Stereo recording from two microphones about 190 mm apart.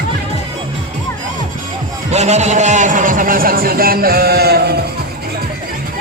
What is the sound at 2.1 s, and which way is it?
A man's voice, 35° right (ahead or behind).